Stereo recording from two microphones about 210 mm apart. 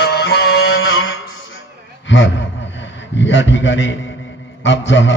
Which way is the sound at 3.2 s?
60° left (ahead or behind).